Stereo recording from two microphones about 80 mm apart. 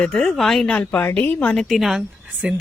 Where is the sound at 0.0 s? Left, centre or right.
Centre.